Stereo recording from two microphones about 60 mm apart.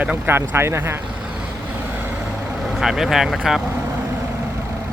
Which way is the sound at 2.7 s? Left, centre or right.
Centre.